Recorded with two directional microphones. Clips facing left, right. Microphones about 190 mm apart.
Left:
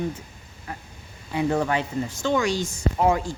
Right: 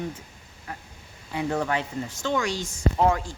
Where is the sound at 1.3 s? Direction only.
15° left (ahead or behind).